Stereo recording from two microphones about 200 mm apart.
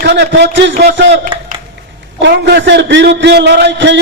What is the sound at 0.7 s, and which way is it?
Speech, 40° right (ahead or behind).